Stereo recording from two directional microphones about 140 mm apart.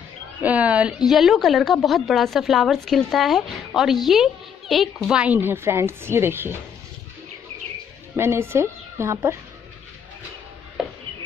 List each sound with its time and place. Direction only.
0.4 s a woman's voice: 10° right (ahead or behind)
8.2 s a woman's voice: 15° right (ahead or behind)